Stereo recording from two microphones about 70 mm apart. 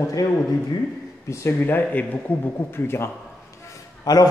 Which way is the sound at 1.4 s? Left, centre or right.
Left.